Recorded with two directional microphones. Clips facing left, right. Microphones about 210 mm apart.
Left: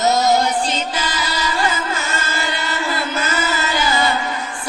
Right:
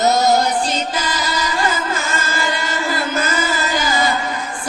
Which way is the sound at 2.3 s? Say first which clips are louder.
Right 2 dB; 45° right (ahead or behind).